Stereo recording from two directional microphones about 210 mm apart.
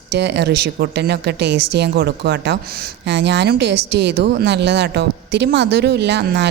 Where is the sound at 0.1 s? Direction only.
55° right (ahead or behind).